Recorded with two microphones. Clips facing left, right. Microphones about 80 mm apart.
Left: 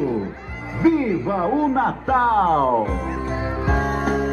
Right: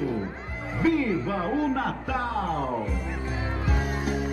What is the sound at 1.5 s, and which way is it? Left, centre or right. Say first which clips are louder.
Speech: left 7 dB; left.